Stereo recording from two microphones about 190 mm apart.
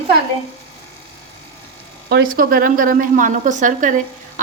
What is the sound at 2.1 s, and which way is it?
A woman's voice, 50° right (ahead or behind).